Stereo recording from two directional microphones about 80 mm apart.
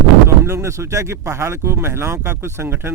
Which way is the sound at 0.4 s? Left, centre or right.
Right.